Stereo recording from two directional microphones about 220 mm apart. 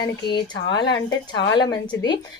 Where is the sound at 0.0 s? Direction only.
20° left (ahead or behind).